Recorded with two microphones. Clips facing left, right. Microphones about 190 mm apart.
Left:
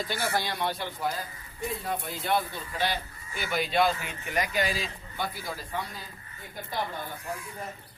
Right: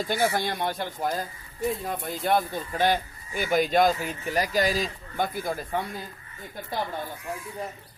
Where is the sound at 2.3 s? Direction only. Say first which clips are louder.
Right 3 dB; 45° right (ahead or behind).